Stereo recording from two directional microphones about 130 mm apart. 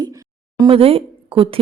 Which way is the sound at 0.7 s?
45° right (ahead or behind).